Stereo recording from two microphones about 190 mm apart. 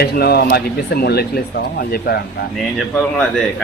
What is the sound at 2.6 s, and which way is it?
Speech, centre (ahead or behind).